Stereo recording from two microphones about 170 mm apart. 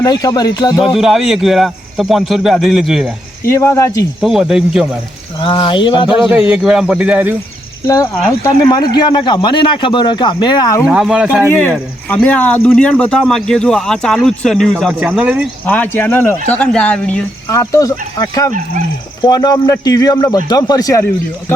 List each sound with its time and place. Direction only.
0.0 s a man's voice: 20° left (ahead or behind)
0.9 s speech: centre (ahead or behind)
3.4 s speech: 15° left (ahead or behind)
4.2 s speech: centre (ahead or behind)
5.4 s a man's voice: 30° left (ahead or behind)
6.1 s speech: 5° right (ahead or behind)
8.4 s a man's voice: 25° left (ahead or behind)
10.8 s speech: 5° right (ahead or behind)
11.4 s speech: 10° left (ahead or behind); by 15.4 s 10° right (ahead or behind)
15.6 s speech: 10° left (ahead or behind)
17.5 s a man's voice: 20° left (ahead or behind)